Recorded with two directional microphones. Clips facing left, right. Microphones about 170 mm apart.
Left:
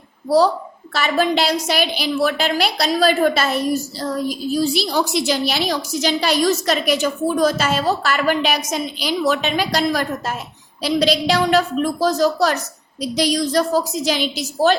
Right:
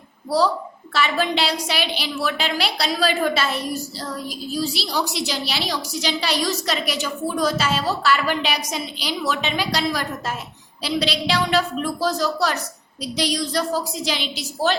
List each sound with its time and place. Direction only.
0.9 s a woman's voice: 45° left (ahead or behind)